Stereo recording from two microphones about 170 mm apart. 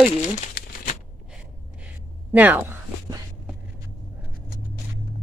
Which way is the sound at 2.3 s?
10° right (ahead or behind).